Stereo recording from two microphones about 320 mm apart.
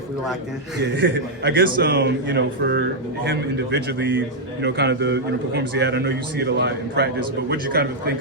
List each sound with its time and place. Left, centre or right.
0.8 s a man's voice: right